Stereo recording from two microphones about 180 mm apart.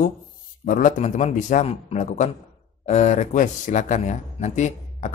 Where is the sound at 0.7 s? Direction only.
45° left (ahead or behind).